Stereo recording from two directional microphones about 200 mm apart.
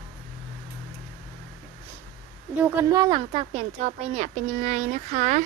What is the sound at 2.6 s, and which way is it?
Speech, 10° right (ahead or behind).